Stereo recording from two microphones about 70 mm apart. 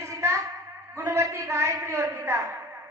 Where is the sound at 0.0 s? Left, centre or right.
Right.